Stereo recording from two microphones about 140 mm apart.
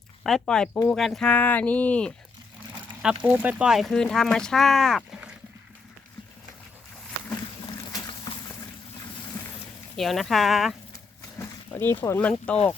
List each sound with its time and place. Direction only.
0.2 s speech: 5° left (ahead or behind)
3.0 s speech: 10° right (ahead or behind)
10.0 s speech: centre (ahead or behind)
10.9 s a sound: 20° left (ahead or behind)